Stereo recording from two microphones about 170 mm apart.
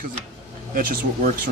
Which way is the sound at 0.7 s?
60° right (ahead or behind).